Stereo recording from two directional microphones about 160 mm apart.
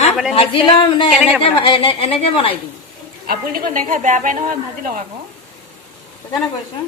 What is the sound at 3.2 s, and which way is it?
A woman's voice, 65° right (ahead or behind).